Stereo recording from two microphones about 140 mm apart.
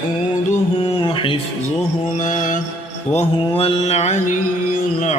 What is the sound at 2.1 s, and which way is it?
Mantra, 65° left (ahead or behind).